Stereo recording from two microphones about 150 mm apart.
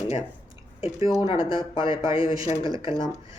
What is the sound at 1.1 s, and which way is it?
Speech, 35° left (ahead or behind).